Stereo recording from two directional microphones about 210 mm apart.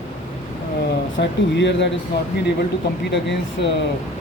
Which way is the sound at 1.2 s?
55° left (ahead or behind).